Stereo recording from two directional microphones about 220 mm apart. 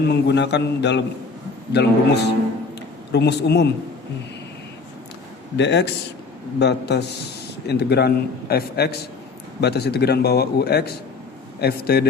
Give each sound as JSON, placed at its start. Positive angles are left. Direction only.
{"t": 0.0, "sound": "a man's voice", "side_deg": 50}
{"t": 5.5, "sound": "a man's voice", "side_deg": 50}